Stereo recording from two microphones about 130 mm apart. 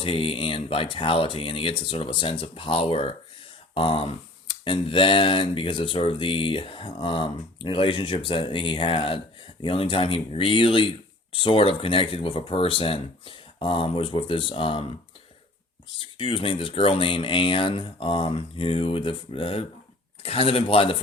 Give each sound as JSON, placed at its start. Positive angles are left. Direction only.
{"t": 0.0, "sound": "speech", "side_deg": 45}
{"t": 16.1, "sound": "speech", "side_deg": 45}